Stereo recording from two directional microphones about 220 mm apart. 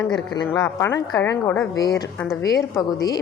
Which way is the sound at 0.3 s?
15° left (ahead or behind).